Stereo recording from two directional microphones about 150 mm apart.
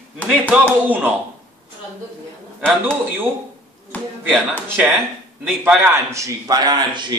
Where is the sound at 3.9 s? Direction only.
10° left (ahead or behind).